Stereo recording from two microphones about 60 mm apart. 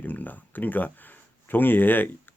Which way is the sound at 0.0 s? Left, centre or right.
Left.